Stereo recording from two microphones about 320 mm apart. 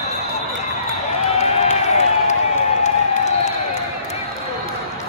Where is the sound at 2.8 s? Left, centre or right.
Left.